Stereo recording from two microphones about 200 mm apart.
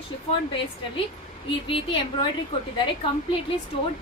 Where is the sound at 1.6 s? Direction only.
25° left (ahead or behind).